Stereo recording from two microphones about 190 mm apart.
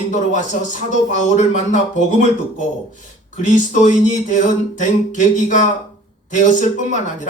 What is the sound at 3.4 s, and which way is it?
Speech, 40° left (ahead or behind).